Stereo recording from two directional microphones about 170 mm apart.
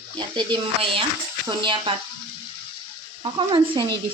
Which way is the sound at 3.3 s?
30° right (ahead or behind).